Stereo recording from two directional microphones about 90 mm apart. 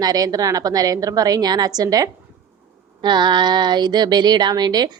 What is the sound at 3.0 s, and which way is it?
Speech, 55° right (ahead or behind).